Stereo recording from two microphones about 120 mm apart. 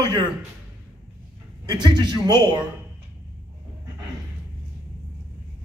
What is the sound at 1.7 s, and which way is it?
Speech, 35° right (ahead or behind).